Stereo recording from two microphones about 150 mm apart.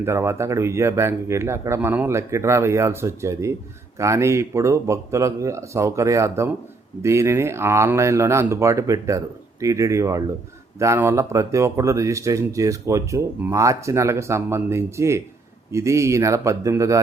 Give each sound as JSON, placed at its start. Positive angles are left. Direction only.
{"t": 0.0, "sound": "speech", "side_deg": -15}